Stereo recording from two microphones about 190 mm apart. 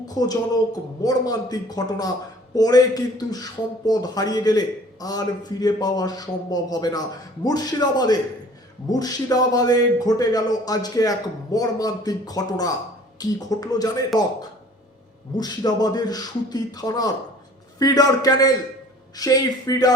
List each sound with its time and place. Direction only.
0.0 s a man's voice: 20° left (ahead or behind)
15.4 s a man's voice: 20° left (ahead or behind)